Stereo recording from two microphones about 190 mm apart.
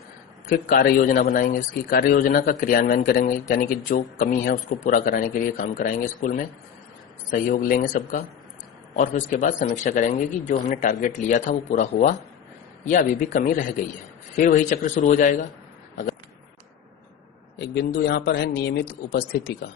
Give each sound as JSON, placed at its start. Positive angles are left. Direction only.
{"t": 0.5, "sound": "speech", "side_deg": 50}
{"t": 17.9, "sound": "speech", "side_deg": 60}